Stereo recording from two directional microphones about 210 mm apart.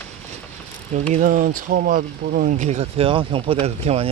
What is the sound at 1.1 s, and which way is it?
Speech, 40° right (ahead or behind).